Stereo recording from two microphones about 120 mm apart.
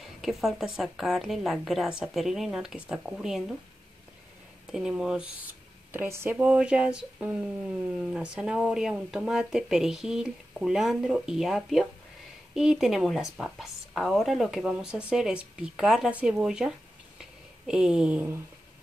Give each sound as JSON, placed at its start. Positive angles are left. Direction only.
{"t": 0.2, "sound": "speech", "side_deg": 0}
{"t": 4.6, "sound": "speech", "side_deg": -5}
{"t": 5.9, "sound": "speech", "side_deg": -20}